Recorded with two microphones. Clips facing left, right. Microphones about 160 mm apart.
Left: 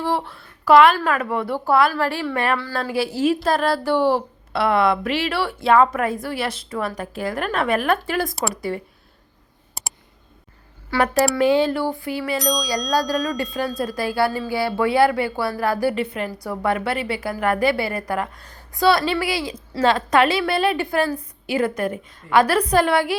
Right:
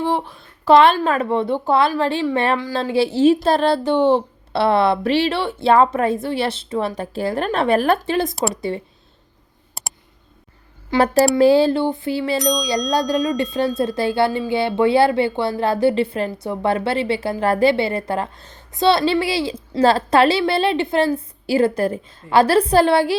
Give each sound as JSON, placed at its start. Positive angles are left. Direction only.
{"t": 0.0, "sound": "speech", "side_deg": -20}
{"t": 9.8, "sound": "clicking", "side_deg": 0}
{"t": 10.9, "sound": "speech", "side_deg": -25}